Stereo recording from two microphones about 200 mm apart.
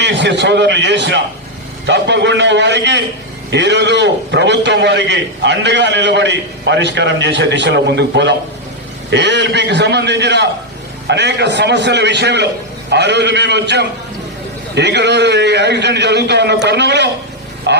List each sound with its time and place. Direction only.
0.0 s a man's voice: 60° right (ahead or behind)